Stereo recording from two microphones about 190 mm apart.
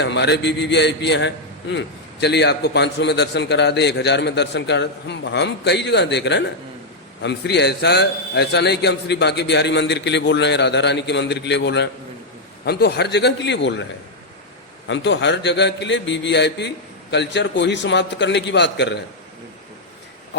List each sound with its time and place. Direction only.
0.0 s a man's voice: 65° left (ahead or behind)
14.8 s a man's voice: 70° left (ahead or behind)